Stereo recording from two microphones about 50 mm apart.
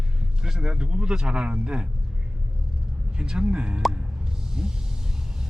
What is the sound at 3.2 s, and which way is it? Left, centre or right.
Speech, centre.